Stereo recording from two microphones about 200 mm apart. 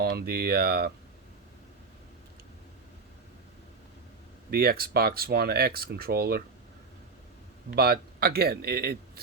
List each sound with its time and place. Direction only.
0.0 s speech: 50° right (ahead or behind)
4.5 s speech: 50° right (ahead or behind)
7.8 s speech: 50° right (ahead or behind)